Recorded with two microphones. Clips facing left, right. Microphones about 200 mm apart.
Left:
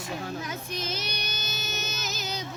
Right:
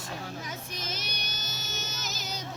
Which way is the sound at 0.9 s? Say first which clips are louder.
Left 5 dB; 65° left (ahead or behind).